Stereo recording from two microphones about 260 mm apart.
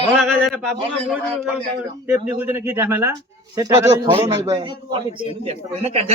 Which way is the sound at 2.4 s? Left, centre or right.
Centre.